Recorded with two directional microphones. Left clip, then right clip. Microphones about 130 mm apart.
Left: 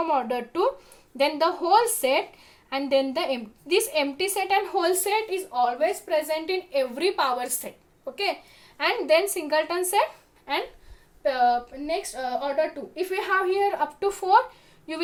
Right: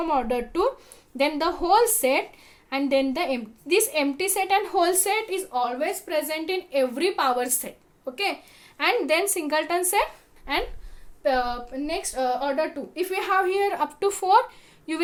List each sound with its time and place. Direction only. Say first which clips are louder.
0.0 s a woman's voice: even; 15° right (ahead or behind)